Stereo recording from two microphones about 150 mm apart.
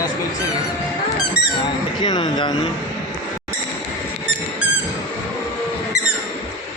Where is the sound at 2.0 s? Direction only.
30° left (ahead or behind).